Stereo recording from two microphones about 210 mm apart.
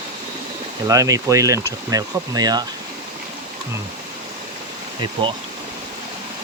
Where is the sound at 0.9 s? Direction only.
15° right (ahead or behind).